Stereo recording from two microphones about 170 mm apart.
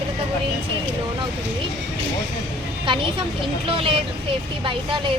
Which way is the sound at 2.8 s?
30° right (ahead or behind).